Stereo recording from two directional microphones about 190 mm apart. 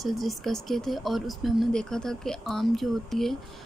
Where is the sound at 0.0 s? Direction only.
Centre (ahead or behind).